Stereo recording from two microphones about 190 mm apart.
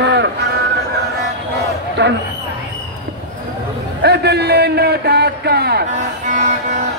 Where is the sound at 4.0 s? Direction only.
60° right (ahead or behind).